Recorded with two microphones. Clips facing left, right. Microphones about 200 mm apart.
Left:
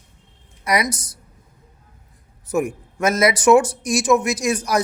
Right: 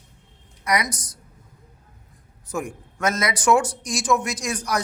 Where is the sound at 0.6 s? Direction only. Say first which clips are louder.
Left 3 dB; 25° left (ahead or behind).